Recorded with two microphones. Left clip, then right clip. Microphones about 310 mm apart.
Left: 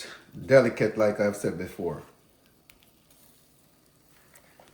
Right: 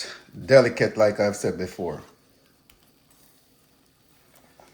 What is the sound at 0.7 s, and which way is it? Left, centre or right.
Speech, right.